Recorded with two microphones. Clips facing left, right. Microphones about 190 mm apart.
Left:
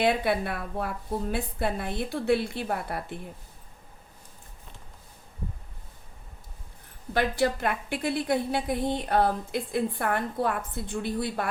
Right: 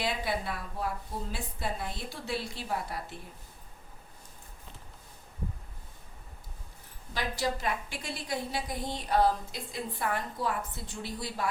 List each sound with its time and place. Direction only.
0.0 s a woman's voice: 60° left (ahead or behind)
7.1 s a woman's voice: 60° left (ahead or behind)